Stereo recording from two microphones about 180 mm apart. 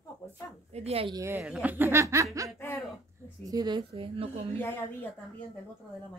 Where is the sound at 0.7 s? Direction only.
35° right (ahead or behind).